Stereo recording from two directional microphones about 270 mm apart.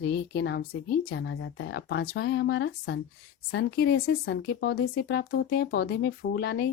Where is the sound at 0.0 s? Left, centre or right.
Left.